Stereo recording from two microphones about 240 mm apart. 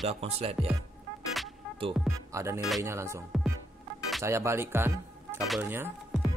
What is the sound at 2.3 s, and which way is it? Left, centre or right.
Speech, centre.